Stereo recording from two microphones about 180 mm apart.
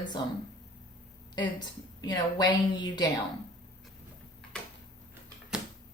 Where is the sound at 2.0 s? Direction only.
25° left (ahead or behind).